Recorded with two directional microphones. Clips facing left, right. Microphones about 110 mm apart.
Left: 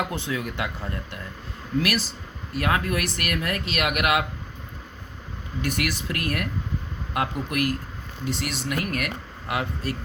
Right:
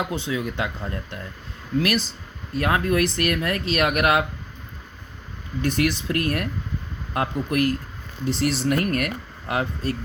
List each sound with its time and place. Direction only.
0.0 s speech: 20° right (ahead or behind)
2.6 s speech: 30° right (ahead or behind)
5.6 s speech: 30° right (ahead or behind)